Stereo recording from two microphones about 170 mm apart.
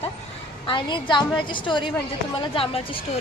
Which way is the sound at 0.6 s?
30° left (ahead or behind).